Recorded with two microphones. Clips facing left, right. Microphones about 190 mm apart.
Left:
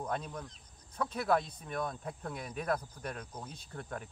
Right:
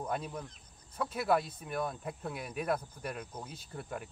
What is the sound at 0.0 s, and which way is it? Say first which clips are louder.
Speech: right 1 dB; 5° right (ahead or behind).